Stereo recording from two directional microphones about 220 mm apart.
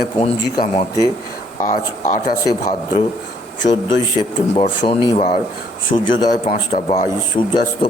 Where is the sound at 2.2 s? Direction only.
15° left (ahead or behind).